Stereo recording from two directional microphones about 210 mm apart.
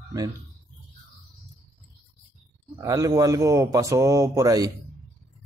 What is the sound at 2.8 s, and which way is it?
Speech, 15° right (ahead or behind).